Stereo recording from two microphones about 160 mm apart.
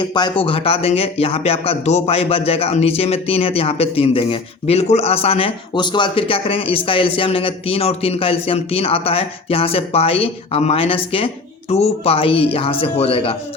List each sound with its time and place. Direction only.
0.0 s speech: 30° left (ahead or behind)